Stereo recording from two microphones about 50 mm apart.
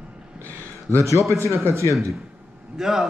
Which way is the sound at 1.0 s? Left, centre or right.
Right.